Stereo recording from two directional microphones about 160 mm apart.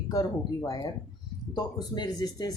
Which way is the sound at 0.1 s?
20° left (ahead or behind).